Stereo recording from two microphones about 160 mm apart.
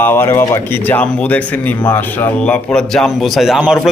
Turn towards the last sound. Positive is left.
turn(degrees=-5)  # may be behind; listen again after turning